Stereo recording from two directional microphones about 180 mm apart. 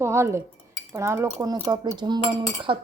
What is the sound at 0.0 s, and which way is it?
Speech, 15° right (ahead or behind).